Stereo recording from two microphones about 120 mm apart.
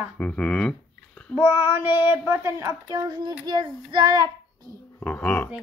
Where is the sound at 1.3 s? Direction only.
15° right (ahead or behind); by 4.3 s 35° right (ahead or behind).